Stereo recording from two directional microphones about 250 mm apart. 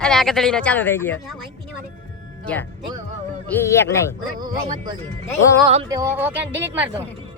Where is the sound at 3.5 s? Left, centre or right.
Centre.